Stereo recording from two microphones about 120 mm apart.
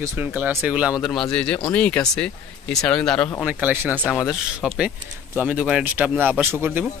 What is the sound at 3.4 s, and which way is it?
Speech, 15° right (ahead or behind).